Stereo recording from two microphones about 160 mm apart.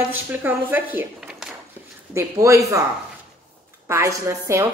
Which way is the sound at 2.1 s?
20° right (ahead or behind).